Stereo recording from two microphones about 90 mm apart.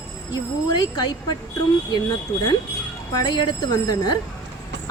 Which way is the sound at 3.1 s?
50° left (ahead or behind).